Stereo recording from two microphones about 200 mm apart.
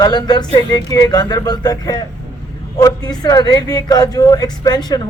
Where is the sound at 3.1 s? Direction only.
20° left (ahead or behind).